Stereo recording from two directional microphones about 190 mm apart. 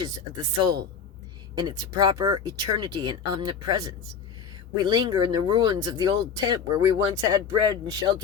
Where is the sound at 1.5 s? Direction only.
20° right (ahead or behind).